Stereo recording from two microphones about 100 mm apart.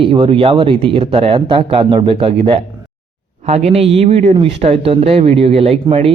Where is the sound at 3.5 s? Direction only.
85° right.